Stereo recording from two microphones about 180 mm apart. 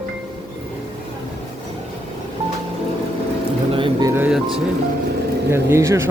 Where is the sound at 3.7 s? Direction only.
30° right (ahead or behind).